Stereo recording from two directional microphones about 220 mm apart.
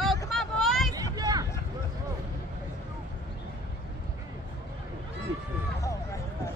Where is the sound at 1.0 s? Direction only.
15° right (ahead or behind).